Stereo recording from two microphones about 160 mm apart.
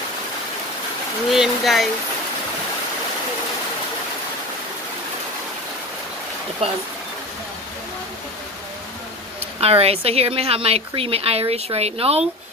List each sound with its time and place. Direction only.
1.3 s speech: centre (ahead or behind)
9.6 s a woman's voice: 40° right (ahead or behind)